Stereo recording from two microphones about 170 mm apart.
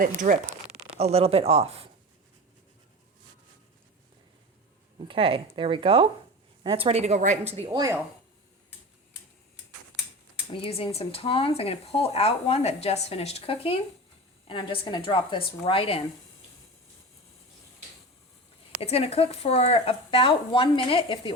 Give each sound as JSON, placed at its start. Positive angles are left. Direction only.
{"t": 0.2, "sound": "speech", "side_deg": -50}
{"t": 0.9, "sound": "a woman's voice", "side_deg": -35}
{"t": 4.9, "sound": "a woman's voice", "side_deg": -30}
{"t": 10.5, "sound": "speech", "side_deg": 35}
{"t": 18.8, "sound": "speech", "side_deg": 35}